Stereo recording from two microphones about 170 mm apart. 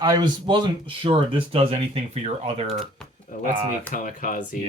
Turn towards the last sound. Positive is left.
turn(degrees=50)  # may be behind; listen again after turning